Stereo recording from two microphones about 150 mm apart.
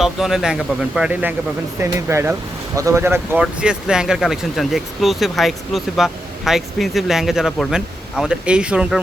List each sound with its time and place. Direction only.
0.0 s speech: centre (ahead or behind)
3.4 s speech: 5° right (ahead or behind)